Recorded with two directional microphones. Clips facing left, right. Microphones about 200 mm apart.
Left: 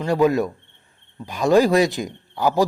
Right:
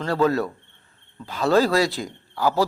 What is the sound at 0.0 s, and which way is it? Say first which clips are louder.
A man's voice: left 3 dB; 15° left (ahead or behind).